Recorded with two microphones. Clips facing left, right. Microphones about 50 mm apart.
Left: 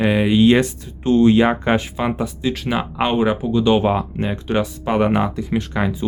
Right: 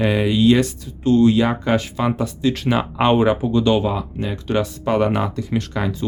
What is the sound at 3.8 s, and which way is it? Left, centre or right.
Speech, left.